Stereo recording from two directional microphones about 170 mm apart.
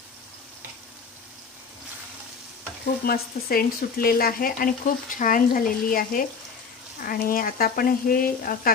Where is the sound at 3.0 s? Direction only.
60° left (ahead or behind).